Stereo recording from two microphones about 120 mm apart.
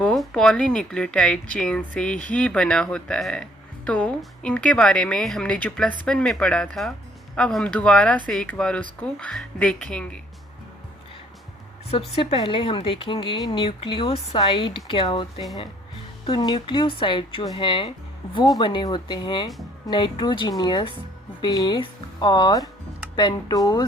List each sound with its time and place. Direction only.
0.0 s speech: 5° left (ahead or behind)
11.9 s speech: 50° left (ahead or behind)
16.4 s speech: 40° left (ahead or behind)